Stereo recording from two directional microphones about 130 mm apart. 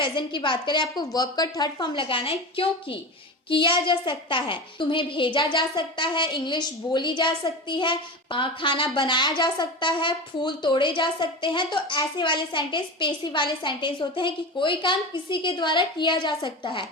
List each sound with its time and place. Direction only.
0.0 s a woman's voice: 40° left (ahead or behind)